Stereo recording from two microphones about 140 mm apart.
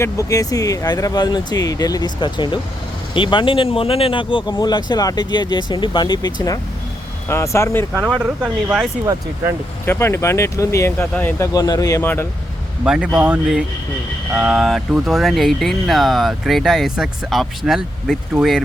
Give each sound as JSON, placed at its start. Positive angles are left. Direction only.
{"t": 0.0, "sound": "speech", "side_deg": 25}
{"t": 8.2, "sound": "speech", "side_deg": -10}
{"t": 9.8, "sound": "speech", "side_deg": 15}
{"t": 11.5, "sound": "speech", "side_deg": 25}
{"t": 12.8, "sound": "speech", "side_deg": -5}